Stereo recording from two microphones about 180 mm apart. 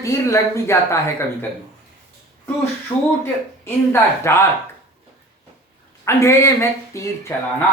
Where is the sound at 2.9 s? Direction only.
25° left (ahead or behind).